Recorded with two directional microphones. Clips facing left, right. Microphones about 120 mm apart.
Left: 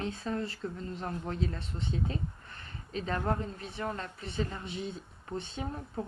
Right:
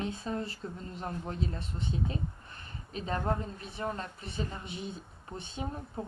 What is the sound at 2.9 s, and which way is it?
A woman's voice, 20° right (ahead or behind).